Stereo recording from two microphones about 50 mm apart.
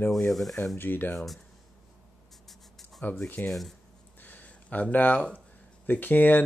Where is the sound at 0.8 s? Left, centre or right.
Left.